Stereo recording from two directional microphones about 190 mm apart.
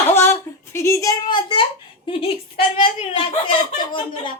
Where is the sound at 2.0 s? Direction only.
30° left (ahead or behind).